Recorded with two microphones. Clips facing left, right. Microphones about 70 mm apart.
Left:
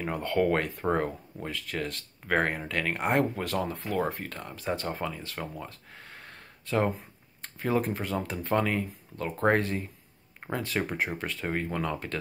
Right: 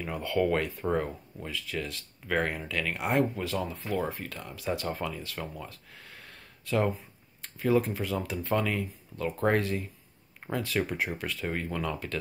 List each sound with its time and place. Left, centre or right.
0.0 s speech: left
4.1 s speech: left
5.7 s a sound: left
7.0 s speech: left